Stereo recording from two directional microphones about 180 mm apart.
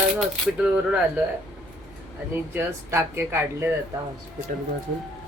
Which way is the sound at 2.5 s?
10° right (ahead or behind).